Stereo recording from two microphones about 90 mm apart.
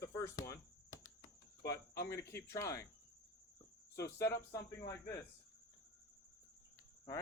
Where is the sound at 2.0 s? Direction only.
30° left (ahead or behind).